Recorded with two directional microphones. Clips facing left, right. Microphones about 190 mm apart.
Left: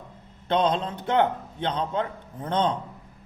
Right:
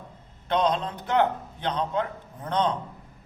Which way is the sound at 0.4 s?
25° left (ahead or behind).